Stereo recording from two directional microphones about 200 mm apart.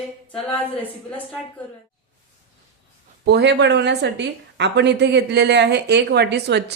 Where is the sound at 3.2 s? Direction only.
60° right (ahead or behind).